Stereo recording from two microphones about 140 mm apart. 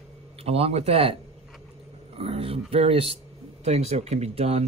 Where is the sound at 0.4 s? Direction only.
45° right (ahead or behind).